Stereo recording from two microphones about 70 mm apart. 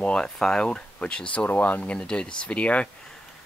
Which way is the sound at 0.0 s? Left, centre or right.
Centre.